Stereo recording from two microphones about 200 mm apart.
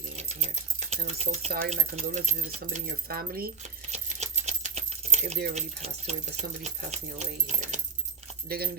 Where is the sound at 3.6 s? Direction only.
35° right (ahead or behind).